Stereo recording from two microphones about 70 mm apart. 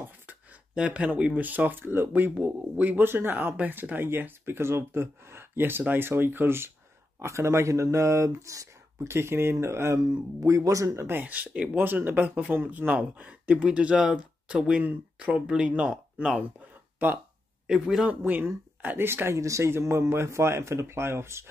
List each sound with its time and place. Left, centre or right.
0.0 s a sound: right
0.7 s speech: centre; by 9.1 s right
9.1 s speech: right
11.1 s speech: right
17.6 s a man's voice: centre
18.2 s speech: right
19.3 s speech: right